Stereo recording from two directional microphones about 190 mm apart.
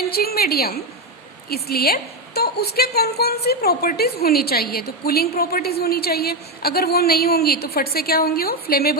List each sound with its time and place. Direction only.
0.1 s a woman's voice: 55° left (ahead or behind)